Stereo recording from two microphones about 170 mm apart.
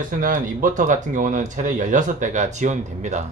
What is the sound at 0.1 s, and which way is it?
Speech, 50° right (ahead or behind).